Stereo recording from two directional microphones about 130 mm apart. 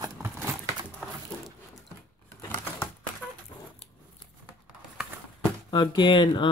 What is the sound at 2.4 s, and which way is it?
Typewriter, 20° left (ahead or behind).